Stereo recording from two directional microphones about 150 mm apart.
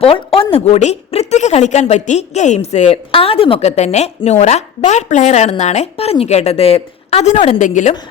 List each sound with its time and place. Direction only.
0.0 s a woman's voice: 40° left (ahead or behind)
7.6 s a woman's voice: 55° left (ahead or behind)